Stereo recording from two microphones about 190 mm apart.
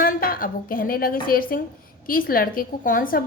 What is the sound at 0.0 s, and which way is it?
A woman's voice, 50° left (ahead or behind).